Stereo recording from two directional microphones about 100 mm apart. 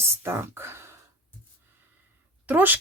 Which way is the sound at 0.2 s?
25° right (ahead or behind).